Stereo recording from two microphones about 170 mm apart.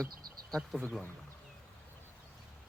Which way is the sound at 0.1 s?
60° right (ahead or behind).